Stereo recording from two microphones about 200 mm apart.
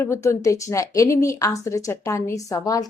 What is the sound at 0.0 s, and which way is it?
A woman's voice, 15° left (ahead or behind).